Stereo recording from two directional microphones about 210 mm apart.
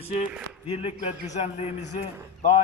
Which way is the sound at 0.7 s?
30° left (ahead or behind).